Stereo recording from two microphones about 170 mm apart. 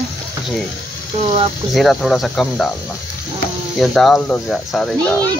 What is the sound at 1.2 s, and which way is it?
Speech, 35° right (ahead or behind).